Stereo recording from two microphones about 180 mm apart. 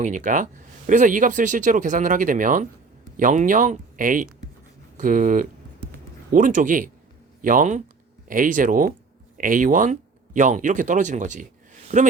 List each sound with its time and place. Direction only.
0.0 s speech: 45° right (ahead or behind)